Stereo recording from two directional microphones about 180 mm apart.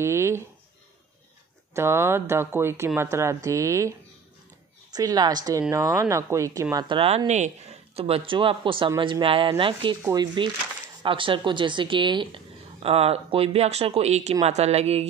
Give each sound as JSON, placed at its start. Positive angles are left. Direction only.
{"t": 0.0, "sound": "speech", "side_deg": -15}
{"t": 1.7, "sound": "speech", "side_deg": -15}
{"t": 4.9, "sound": "speech", "side_deg": -20}